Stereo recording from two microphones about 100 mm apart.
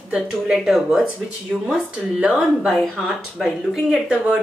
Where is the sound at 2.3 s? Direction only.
Centre (ahead or behind).